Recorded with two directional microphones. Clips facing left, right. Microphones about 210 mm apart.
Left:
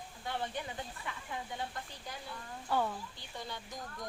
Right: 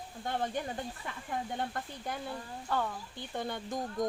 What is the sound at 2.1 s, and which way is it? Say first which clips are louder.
Speech: right 10 dB; 55° right (ahead or behind).